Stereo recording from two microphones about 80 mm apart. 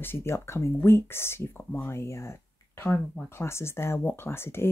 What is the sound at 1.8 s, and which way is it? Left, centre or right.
Speech, left.